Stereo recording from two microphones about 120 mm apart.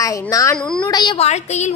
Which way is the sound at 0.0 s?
25° left (ahead or behind).